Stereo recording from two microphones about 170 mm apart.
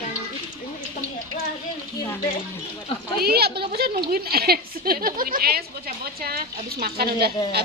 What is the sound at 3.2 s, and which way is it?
A woman's voice, 65° right (ahead or behind).